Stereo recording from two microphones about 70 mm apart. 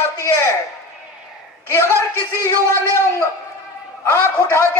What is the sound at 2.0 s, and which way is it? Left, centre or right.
A man's voice, left.